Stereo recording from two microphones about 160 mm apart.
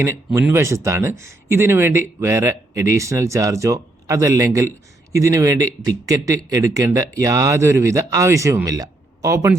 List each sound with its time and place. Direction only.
0.3 s speech: 15° right (ahead or behind)